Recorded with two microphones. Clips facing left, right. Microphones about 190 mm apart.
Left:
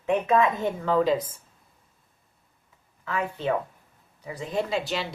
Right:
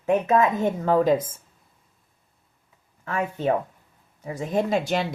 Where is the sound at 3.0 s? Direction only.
45° right (ahead or behind).